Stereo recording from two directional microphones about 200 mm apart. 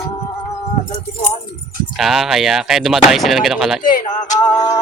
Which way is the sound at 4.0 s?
40° left (ahead or behind).